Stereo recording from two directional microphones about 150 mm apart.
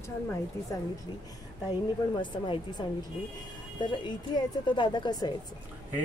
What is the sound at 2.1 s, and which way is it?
Speech, 35° left (ahead or behind).